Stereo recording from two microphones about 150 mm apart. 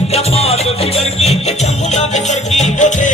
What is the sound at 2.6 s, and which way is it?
Music, 55° left (ahead or behind).